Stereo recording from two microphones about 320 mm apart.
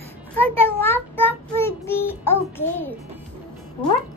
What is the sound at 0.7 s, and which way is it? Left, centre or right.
Child singing, centre.